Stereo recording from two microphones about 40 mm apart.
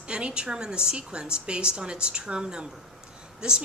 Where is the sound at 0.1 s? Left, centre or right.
Right.